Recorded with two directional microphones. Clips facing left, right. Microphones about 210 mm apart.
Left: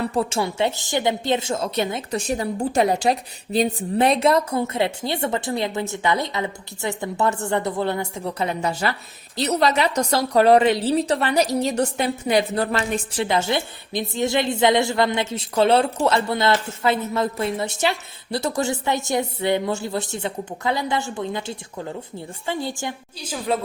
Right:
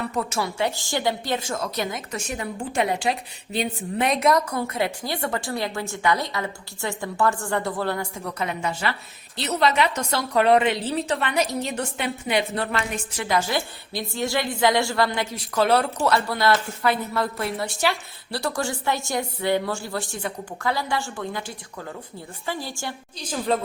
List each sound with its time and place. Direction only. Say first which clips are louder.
0.0 s a woman's voice: left 4 dB; 30° left (ahead or behind)
23.2 s speech: even; 5° left (ahead or behind)